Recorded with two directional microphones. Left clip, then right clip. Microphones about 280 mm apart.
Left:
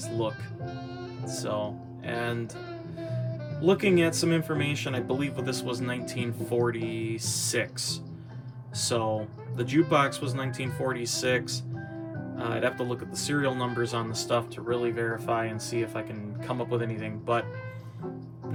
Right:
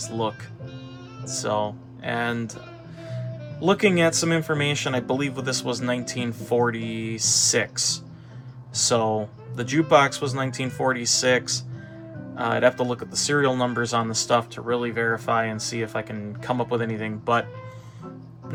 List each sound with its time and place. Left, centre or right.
0.0 s speech: right
3.6 s speech: right